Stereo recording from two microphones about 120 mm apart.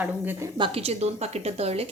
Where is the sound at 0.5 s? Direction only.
50° right (ahead or behind).